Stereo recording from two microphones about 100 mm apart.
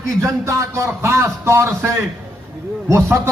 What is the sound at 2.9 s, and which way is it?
Speech, 25° right (ahead or behind).